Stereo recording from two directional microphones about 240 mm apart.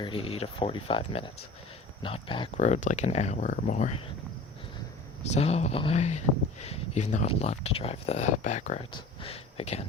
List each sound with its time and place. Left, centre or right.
0.0 s speech: left
5.2 s speech: left